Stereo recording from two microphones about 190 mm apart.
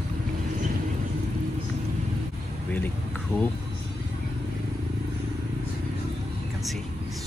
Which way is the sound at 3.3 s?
10° left (ahead or behind).